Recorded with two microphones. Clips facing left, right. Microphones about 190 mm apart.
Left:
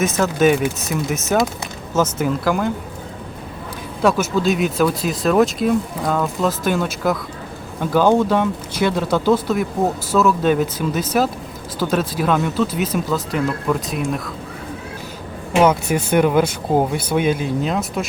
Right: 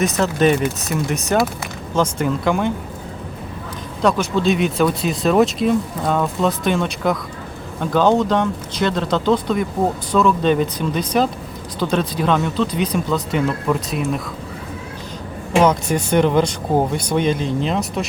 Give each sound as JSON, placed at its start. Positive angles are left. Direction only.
{"t": 0.2, "sound": "speech", "side_deg": 5}
{"t": 4.0, "sound": "speech", "side_deg": 5}
{"t": 15.6, "sound": "speech", "side_deg": 5}